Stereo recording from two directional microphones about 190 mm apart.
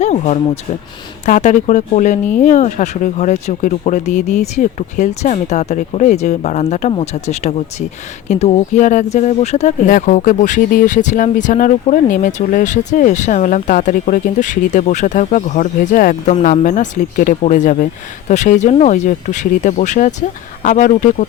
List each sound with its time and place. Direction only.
0.0 s speech: 35° left (ahead or behind)